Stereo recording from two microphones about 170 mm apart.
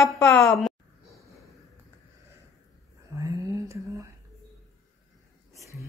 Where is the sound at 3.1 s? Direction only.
15° right (ahead or behind).